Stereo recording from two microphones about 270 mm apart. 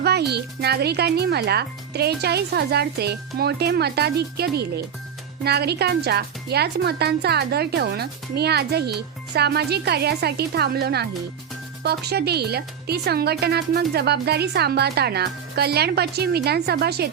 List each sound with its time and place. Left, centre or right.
0.0 s speech: right